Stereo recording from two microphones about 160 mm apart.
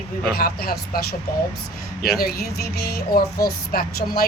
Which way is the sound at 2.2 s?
70° left (ahead or behind).